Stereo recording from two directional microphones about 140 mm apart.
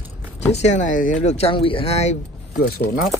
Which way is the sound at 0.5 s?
55° left (ahead or behind).